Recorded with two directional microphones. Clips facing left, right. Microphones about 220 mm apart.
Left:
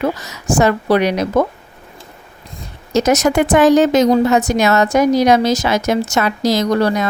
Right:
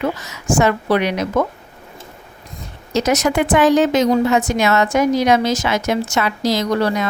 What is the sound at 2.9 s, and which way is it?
A woman's voice, 45° left (ahead or behind).